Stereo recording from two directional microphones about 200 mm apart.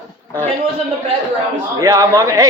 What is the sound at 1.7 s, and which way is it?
Speech, 15° right (ahead or behind).